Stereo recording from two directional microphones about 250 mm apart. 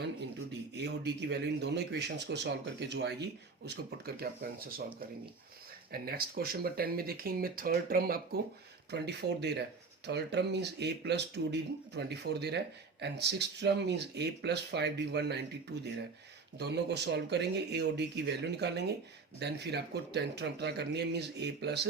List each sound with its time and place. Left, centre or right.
0.8 s speech: right
5.9 s speech: right